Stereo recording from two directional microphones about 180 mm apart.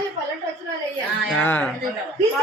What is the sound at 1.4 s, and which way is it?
Speech, 10° left (ahead or behind).